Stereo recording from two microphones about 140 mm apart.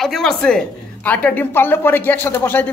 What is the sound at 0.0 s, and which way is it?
A woman's voice, centre (ahead or behind).